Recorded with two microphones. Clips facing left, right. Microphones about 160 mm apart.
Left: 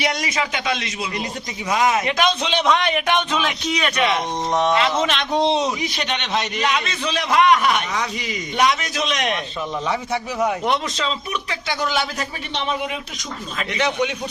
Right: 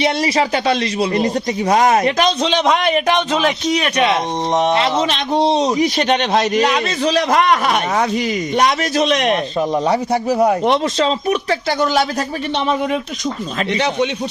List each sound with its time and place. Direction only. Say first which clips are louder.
0.0 s speech: right 7 dB; 30° right (ahead or behind)
13.6 s speech: right 3 dB; 35° right (ahead or behind)